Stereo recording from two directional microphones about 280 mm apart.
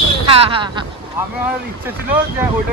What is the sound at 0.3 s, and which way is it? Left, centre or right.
Speech, centre.